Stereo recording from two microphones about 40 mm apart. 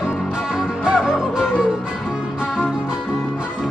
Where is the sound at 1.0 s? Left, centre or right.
Centre.